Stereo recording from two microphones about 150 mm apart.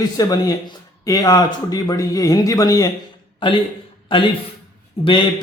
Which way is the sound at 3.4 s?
35° left (ahead or behind).